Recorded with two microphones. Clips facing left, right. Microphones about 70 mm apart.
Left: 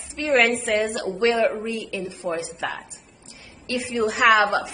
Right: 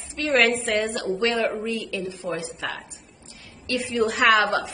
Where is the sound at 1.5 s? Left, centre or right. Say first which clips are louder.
Even; left.